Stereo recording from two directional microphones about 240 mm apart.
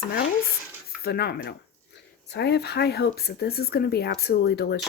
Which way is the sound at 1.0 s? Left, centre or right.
Left.